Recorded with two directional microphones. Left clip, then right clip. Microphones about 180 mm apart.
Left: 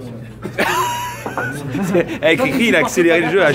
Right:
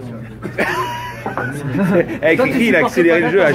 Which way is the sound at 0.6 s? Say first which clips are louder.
Left 2 dB; 10° left (ahead or behind).